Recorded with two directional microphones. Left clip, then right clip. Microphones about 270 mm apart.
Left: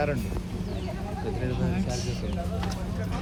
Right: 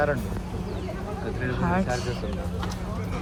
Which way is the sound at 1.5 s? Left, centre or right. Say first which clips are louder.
Right 6 dB; centre.